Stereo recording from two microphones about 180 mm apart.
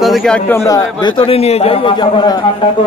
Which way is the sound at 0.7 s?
20° left (ahead or behind).